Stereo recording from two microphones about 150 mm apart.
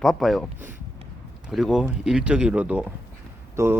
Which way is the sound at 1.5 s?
Centre (ahead or behind).